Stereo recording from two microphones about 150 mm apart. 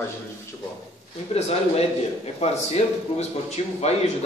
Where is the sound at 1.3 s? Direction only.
45° left (ahead or behind).